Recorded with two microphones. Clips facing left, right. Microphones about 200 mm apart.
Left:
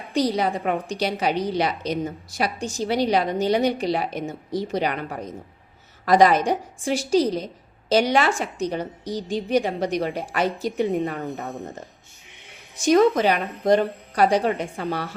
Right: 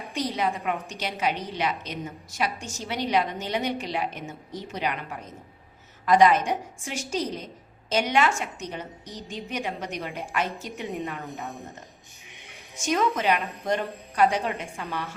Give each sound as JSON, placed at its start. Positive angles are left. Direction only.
{"t": 0.1, "sound": "a woman's voice", "side_deg": 35}
{"t": 12.8, "sound": "a woman's voice", "side_deg": 35}